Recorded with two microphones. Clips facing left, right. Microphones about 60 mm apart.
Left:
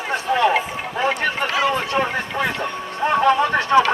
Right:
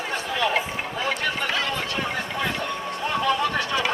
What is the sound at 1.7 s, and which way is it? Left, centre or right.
Vehicle, left.